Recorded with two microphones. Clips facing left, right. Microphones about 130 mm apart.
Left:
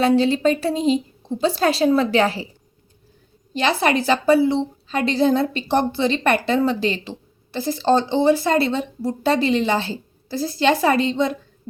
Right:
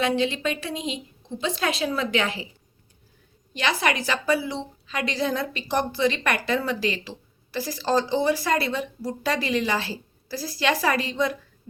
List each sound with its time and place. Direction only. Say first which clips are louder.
0.0 s a woman's voice: left 7 dB; 35° left (ahead or behind)
3.5 s a woman's voice: left 6 dB; 30° left (ahead or behind)